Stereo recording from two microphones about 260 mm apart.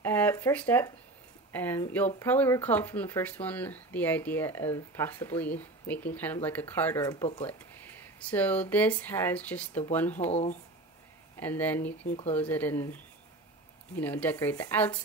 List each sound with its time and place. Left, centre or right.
0.0 s a sound: centre
1.5 s speech: centre
10.3 s speech: left
11.3 s speech: centre
12.1 s speech: left
12.4 s speech: centre